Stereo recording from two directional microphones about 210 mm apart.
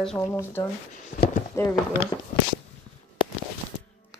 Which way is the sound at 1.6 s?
15° left (ahead or behind).